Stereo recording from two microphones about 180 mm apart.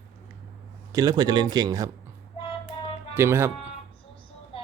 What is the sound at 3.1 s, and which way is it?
Speech, 15° right (ahead or behind).